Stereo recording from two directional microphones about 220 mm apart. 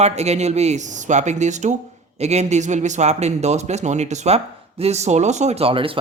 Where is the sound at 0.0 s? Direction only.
30° right (ahead or behind).